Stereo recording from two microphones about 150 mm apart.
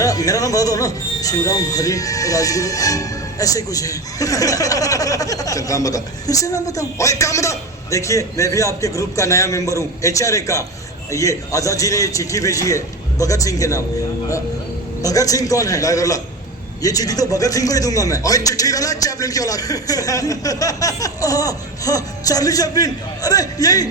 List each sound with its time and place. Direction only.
0.0 s speech: 25° left (ahead or behind)
15.0 s speech: 25° left (ahead or behind)